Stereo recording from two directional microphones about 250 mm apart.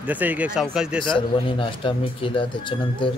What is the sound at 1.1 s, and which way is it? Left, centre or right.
Speech, centre.